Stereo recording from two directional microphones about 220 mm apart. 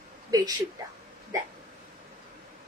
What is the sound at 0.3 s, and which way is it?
Speech, 15° right (ahead or behind).